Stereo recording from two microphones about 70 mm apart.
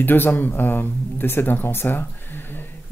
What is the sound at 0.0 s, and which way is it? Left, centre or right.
Speech, left.